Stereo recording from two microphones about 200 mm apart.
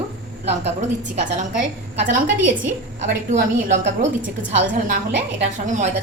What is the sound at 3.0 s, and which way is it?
A woman's voice, 35° right (ahead or behind).